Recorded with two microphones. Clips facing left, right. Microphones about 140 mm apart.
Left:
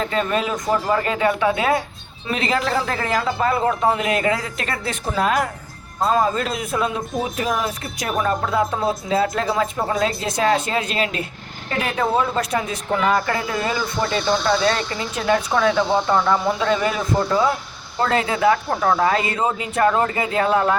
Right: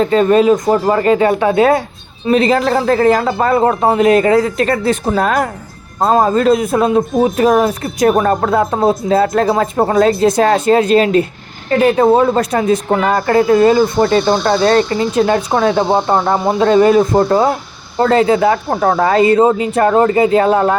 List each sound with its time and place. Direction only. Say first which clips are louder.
0.0 s a man's voice: right 11 dB; 35° right (ahead or behind)